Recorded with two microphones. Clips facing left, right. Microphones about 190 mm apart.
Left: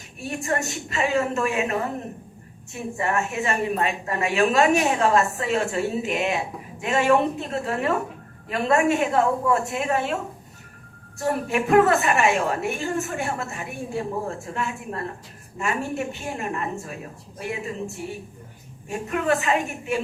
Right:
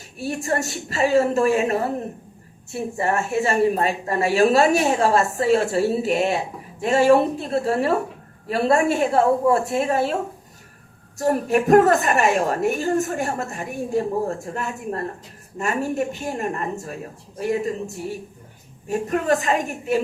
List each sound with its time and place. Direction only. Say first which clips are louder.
0.2 s a woman's voice: right 3 dB; 35° right (ahead or behind)
11.2 s a woman's voice: right 4 dB; 40° right (ahead or behind)
18.9 s a woman's voice: right 3 dB; 40° right (ahead or behind)